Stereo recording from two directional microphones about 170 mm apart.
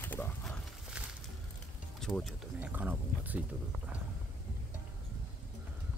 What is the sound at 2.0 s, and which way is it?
Speech, centre (ahead or behind).